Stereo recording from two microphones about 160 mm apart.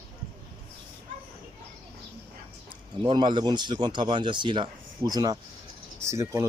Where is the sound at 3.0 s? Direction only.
30° right (ahead or behind).